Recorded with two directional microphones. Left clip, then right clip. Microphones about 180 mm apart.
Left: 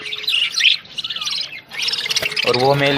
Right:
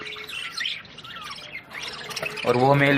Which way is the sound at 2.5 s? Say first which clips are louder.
Left 3 dB; 25° left (ahead or behind).